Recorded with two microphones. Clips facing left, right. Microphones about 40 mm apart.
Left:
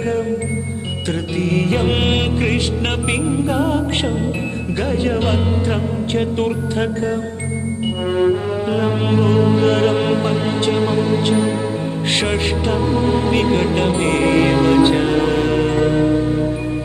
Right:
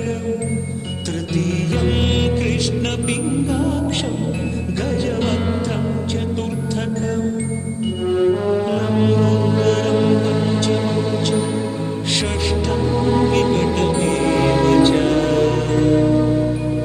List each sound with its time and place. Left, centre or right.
1.0 s music: left